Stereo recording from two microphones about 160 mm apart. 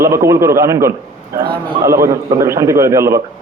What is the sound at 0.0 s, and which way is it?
Speech, 15° right (ahead or behind).